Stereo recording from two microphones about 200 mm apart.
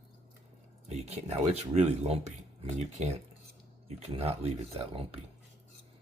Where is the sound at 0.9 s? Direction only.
30° right (ahead or behind).